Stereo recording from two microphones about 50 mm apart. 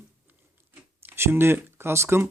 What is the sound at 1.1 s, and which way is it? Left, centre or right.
Speech, right.